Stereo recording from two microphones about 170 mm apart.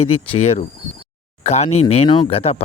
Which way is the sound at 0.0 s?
35° left (ahead or behind).